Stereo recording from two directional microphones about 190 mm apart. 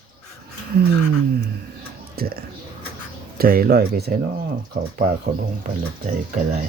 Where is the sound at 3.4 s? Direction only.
50° right (ahead or behind).